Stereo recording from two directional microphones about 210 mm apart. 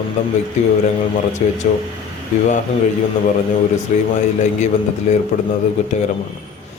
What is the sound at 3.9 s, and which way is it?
A man's voice, 35° left (ahead or behind).